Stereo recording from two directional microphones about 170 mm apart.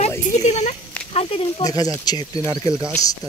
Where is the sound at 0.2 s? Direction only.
40° left (ahead or behind).